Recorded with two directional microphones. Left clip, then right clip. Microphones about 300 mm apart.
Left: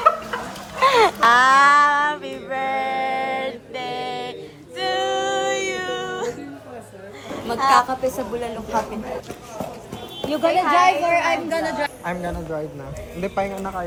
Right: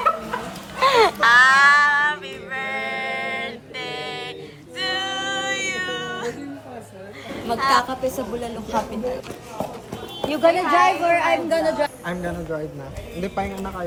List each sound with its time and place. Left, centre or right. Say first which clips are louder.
0.8 s a sound: left 1 dB; centre
1.2 s female singing: right 1 dB; left
4.8 s music: left 3 dB; left
7.7 s a woman's voice: left 4 dB; centre
10.2 s a woman's voice: right 1 dB; centre